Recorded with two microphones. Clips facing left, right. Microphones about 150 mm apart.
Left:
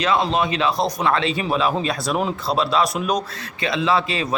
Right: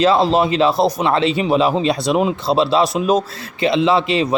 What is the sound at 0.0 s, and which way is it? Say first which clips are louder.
Speech: right 6 dB; 30° right (ahead or behind).